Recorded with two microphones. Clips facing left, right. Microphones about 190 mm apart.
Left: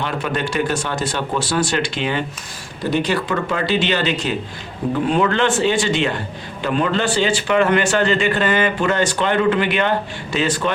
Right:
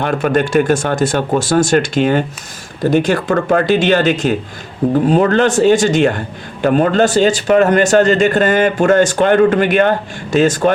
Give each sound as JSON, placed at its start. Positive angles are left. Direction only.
{"t": 0.0, "sound": "speech", "side_deg": -50}